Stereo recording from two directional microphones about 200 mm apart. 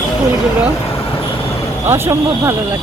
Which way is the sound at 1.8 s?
10° right (ahead or behind).